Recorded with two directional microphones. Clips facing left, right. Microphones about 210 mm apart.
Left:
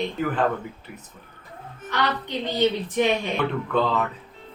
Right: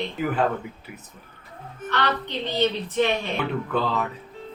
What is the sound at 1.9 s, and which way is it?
A woman's voice, 10° left (ahead or behind).